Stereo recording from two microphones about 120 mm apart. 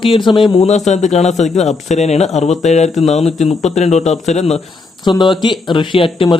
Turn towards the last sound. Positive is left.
turn(degrees=45)  # may be behind; listen again after turning